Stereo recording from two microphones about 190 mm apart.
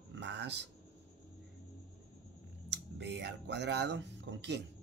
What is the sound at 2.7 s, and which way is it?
Speech, 65° right (ahead or behind).